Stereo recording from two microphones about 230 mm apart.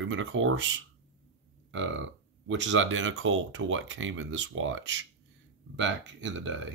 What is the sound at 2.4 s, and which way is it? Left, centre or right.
Speech, right.